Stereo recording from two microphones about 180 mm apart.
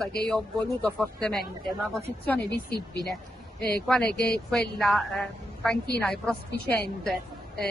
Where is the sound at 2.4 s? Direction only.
65° left (ahead or behind).